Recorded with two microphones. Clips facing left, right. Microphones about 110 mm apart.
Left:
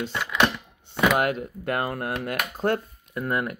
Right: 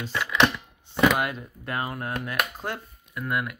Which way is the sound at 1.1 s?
60° left (ahead or behind).